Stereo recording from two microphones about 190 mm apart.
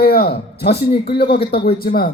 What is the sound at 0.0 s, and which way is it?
A man's voice, 55° left (ahead or behind).